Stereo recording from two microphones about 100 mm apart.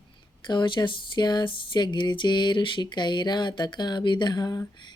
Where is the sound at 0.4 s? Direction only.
50° left (ahead or behind).